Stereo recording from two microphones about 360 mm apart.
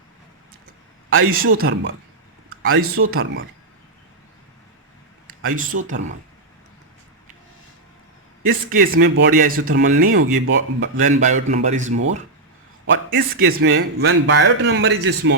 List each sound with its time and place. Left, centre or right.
1.1 s speech: right
1.5 s speech: right
5.5 s speech: right
8.4 s speech: right
9.8 s speech: right
13.4 s speech: right